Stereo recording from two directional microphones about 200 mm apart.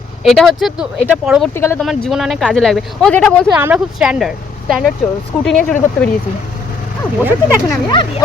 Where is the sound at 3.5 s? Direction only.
5° right (ahead or behind).